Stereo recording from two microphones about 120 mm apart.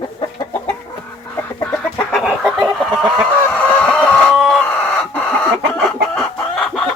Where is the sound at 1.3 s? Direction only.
15° left (ahead or behind).